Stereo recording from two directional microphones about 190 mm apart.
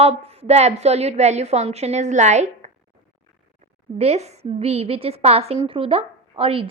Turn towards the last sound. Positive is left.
turn(degrees=-30)  # may be behind; listen again after turning